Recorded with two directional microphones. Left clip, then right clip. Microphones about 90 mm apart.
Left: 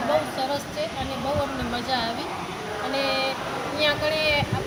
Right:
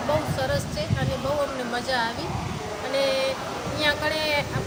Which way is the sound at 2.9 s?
30° right (ahead or behind).